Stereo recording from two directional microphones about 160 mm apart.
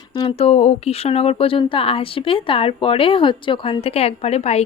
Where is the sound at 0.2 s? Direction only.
35° left (ahead or behind).